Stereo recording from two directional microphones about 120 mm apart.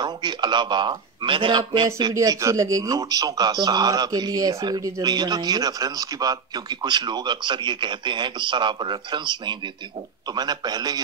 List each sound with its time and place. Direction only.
0.0 s speech: 40° right (ahead or behind)
2.1 s speech: 25° right (ahead or behind)